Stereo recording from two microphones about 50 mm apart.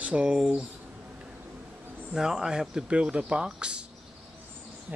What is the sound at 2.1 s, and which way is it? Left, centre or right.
Speech, centre.